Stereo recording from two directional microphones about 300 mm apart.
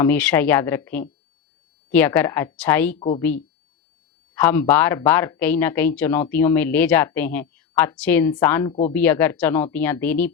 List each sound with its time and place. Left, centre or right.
0.0 s speech: centre
3.0 s speech: centre
4.4 s a woman's voice: centre